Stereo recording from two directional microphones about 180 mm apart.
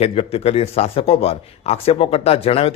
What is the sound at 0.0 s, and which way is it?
A man's voice, 35° left (ahead or behind).